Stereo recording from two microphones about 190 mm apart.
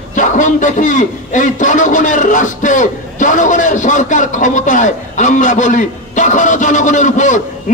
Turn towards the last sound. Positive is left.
turn(degrees=40)  # may be behind; listen again after turning